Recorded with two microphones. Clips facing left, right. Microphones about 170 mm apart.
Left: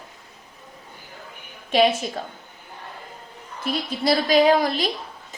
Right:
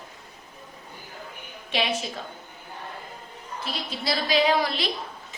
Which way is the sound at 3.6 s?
50° left (ahead or behind).